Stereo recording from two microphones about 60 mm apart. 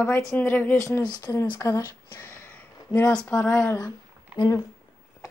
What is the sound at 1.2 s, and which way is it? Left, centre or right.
Speech, left.